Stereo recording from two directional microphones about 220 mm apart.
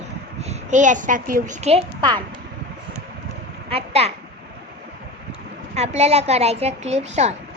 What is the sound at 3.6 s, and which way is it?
Speech, 25° right (ahead or behind).